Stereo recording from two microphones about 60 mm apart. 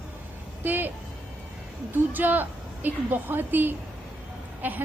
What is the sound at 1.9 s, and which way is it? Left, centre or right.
A woman's voice, right.